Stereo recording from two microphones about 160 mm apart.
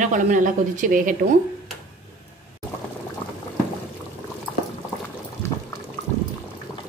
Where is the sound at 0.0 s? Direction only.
55° right (ahead or behind).